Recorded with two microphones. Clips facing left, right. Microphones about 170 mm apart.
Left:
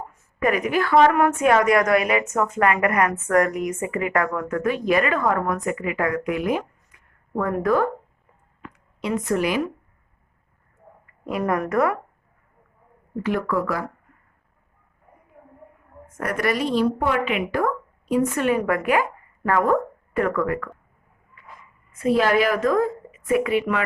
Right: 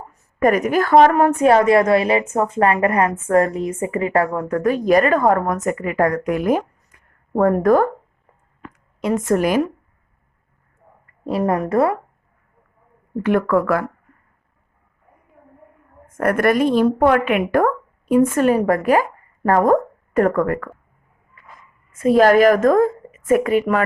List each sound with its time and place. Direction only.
0.1 s a woman's voice: 45° right (ahead or behind)
11.3 s a woman's voice: 30° right (ahead or behind)
13.2 s speech: 60° right (ahead or behind)
16.1 s a woman's voice: 55° right (ahead or behind)
21.9 s a woman's voice: 45° right (ahead or behind)